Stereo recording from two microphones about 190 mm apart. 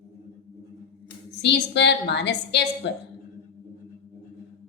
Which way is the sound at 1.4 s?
65° left (ahead or behind).